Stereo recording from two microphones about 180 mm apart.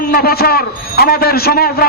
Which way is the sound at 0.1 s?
60° left (ahead or behind).